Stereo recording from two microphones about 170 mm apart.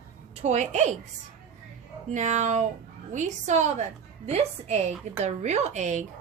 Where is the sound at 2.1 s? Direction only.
45° right (ahead or behind).